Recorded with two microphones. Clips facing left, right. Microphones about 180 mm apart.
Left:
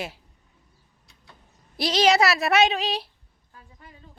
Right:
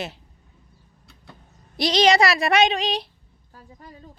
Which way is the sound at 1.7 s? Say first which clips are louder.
Right 2 dB; 5° left (ahead or behind).